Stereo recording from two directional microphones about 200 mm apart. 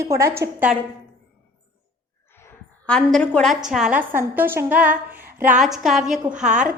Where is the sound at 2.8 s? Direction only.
5° left (ahead or behind).